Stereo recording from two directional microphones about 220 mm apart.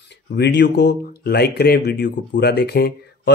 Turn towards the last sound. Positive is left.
turn(degrees=45)  # may be behind; listen again after turning